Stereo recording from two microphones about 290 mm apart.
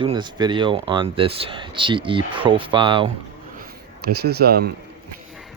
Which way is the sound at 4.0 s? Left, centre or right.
Right.